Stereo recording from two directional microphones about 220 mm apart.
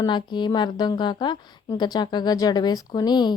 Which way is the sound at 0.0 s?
20° left (ahead or behind).